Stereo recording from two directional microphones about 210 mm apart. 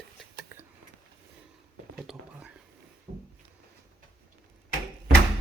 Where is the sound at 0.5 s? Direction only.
10° right (ahead or behind).